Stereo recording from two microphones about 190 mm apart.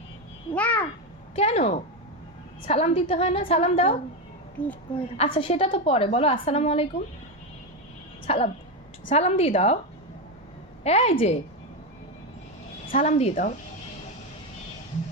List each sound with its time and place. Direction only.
0.5 s babbling: 5° left (ahead or behind)
1.4 s a woman's voice: 35° left (ahead or behind)
4.6 s speech: 5° left (ahead or behind)
5.1 s a woman's voice: 30° left (ahead or behind)
8.3 s a woman's voice: 30° left (ahead or behind)
10.8 s a woman's voice: 30° left (ahead or behind)
13.0 s a woman's voice: 35° left (ahead or behind)